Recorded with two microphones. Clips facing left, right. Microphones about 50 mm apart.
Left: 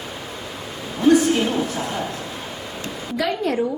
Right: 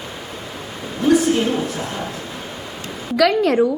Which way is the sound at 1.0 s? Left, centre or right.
Centre.